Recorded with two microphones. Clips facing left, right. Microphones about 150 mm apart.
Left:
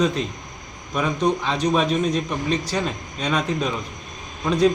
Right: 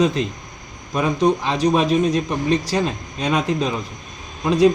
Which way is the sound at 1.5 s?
10° right (ahead or behind).